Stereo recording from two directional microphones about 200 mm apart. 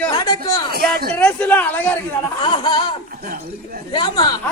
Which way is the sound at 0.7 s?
50° right (ahead or behind).